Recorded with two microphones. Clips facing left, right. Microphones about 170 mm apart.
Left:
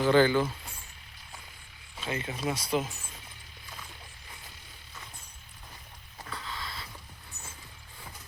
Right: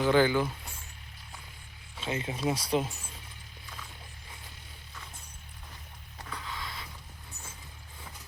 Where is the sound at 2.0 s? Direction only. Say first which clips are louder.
Right 2 dB; 25° right (ahead or behind).